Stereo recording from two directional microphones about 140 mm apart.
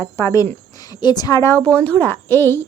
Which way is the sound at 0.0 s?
20° left (ahead or behind).